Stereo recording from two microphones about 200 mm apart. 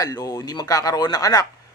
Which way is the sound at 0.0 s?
20° left (ahead or behind).